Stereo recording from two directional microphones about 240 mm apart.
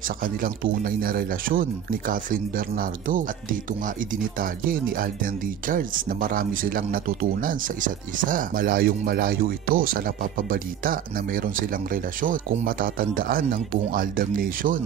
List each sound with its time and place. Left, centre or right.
0.2 s speech: right